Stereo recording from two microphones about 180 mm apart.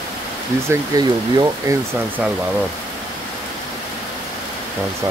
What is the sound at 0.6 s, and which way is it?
Speech, 20° right (ahead or behind).